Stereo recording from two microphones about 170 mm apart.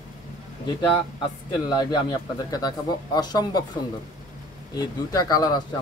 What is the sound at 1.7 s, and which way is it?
Speech, 25° left (ahead or behind).